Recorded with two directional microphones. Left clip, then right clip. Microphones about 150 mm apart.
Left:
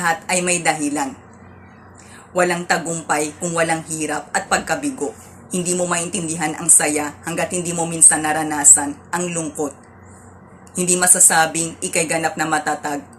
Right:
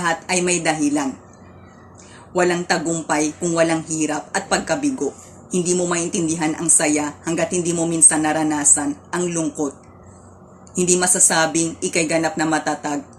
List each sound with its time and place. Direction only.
0.0 s a woman's voice: 15° right (ahead or behind)
2.3 s a woman's voice: 15° right (ahead or behind)
10.8 s a woman's voice: 15° right (ahead or behind)